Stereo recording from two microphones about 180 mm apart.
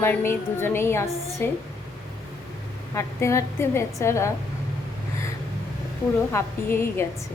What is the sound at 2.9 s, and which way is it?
A woman's voice, 15° left (ahead or behind).